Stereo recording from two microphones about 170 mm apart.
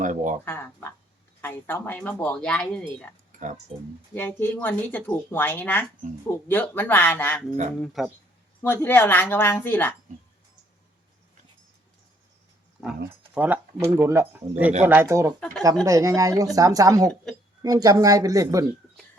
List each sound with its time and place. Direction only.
0.0 s speech: 50° right (ahead or behind)
0.4 s speech: 15° left (ahead or behind)
4.1 s speech: 10° left (ahead or behind)
7.8 s speech: centre (ahead or behind)
8.6 s speech: 10° left (ahead or behind)
13.3 s speech: 10° right (ahead or behind)
15.4 s speech: 5° left (ahead or behind)
15.8 s speech: 20° right (ahead or behind)